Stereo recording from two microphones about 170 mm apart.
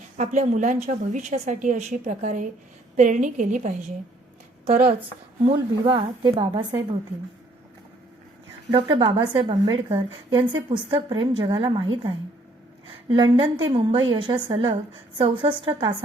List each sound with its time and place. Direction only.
0.2 s a woman's voice: 45° right (ahead or behind)
4.7 s a woman's voice: 60° right (ahead or behind)
5.5 s a woman's voice: 30° right (ahead or behind)
8.7 s a woman's voice: 30° right (ahead or behind)
13.1 s a woman's voice: 25° right (ahead or behind)